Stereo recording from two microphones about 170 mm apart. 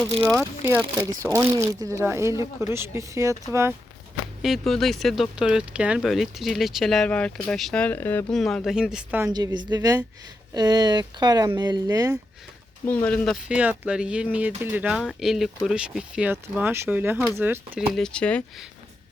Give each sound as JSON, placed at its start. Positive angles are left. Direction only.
{"t": 0.2, "sound": "speech", "side_deg": 0}
{"t": 1.2, "sound": "speech", "side_deg": -20}
{"t": 4.4, "sound": "speech", "side_deg": 0}
{"t": 9.3, "sound": "speech", "side_deg": -25}
{"t": 12.8, "sound": "speech", "side_deg": 10}
{"t": 17.9, "sound": "speech", "side_deg": 5}